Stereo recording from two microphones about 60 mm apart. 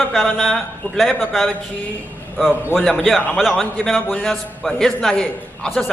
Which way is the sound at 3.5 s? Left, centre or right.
Centre.